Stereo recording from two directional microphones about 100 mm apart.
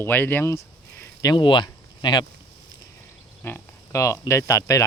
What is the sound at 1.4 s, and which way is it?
Speech, 50° left (ahead or behind).